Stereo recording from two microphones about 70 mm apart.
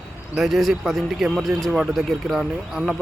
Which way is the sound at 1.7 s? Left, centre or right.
Centre.